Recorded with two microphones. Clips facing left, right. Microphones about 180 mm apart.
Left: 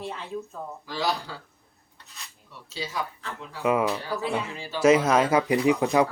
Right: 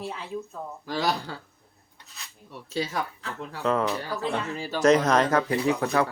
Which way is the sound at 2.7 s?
50° right (ahead or behind).